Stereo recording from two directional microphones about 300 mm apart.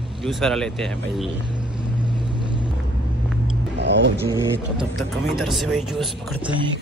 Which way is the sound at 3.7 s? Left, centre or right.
Right.